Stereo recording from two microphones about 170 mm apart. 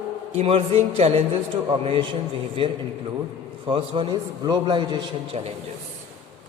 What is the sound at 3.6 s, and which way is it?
A man's voice, 30° right (ahead or behind).